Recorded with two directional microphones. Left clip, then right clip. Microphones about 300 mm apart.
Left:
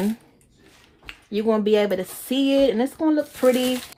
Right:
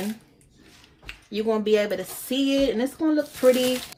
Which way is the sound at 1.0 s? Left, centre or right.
Left.